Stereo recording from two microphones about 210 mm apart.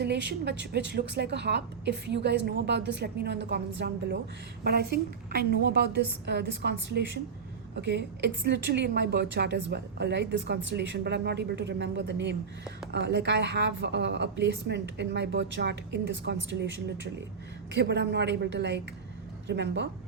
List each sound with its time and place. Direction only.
0.0 s a woman's voice: 55° right (ahead or behind)